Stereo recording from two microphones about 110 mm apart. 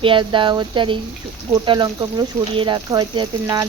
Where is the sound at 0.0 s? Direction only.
45° right (ahead or behind).